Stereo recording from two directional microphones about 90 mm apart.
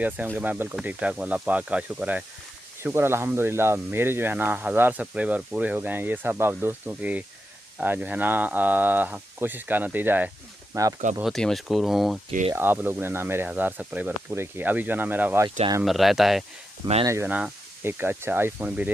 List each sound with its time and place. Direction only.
0.4 s speech: 20° right (ahead or behind)
2.8 s speech: 30° right (ahead or behind)
10.8 s speech: 40° right (ahead or behind)
11.2 s speech: centre (ahead or behind)
12.5 s speech: 25° right (ahead or behind)
15.8 s speech: centre (ahead or behind)
17.0 s speech: 30° right (ahead or behind)